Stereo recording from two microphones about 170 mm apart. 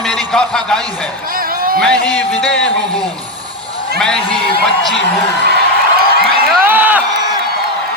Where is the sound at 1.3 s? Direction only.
55° right (ahead or behind).